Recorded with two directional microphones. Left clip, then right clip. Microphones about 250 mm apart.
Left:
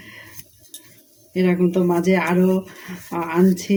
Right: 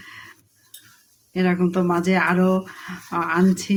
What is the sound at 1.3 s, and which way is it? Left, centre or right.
Speech, centre.